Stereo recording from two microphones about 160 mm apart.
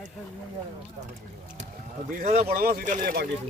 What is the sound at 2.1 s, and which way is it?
Speech, 60° right (ahead or behind).